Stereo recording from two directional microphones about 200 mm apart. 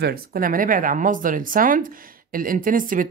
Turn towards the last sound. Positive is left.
turn(degrees=-45)  # may be behind; listen again after turning